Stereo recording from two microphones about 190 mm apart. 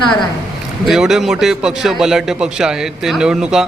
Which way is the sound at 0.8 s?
Centre (ahead or behind).